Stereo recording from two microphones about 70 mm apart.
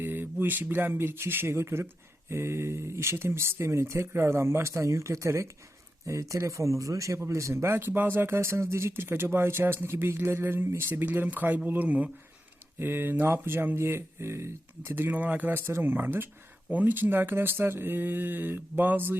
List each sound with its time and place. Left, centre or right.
0.0 s speech: right
12.8 s speech: right